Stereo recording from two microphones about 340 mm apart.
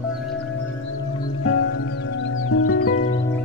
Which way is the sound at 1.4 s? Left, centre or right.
Left.